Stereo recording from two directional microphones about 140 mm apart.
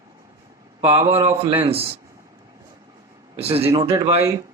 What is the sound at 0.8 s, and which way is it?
Speech, 40° right (ahead or behind).